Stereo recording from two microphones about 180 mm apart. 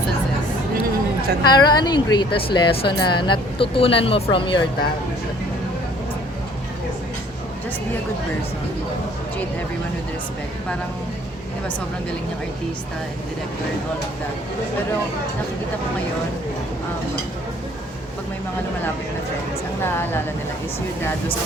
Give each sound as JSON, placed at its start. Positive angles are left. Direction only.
{"t": 1.5, "sound": "speech", "side_deg": 25}
{"t": 19.8, "sound": "a woman's voice", "side_deg": 15}